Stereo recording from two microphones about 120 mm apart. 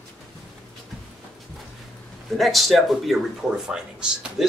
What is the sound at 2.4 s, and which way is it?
Speech, centre (ahead or behind).